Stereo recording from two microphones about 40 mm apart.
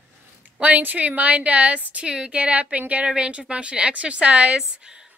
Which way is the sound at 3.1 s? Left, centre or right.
Right.